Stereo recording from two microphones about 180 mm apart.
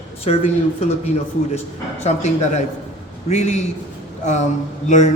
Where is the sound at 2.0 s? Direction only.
40° left (ahead or behind).